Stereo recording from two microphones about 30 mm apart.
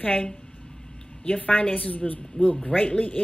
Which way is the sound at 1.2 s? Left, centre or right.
Left.